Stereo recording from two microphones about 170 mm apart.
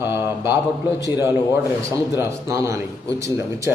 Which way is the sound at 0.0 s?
15° right (ahead or behind).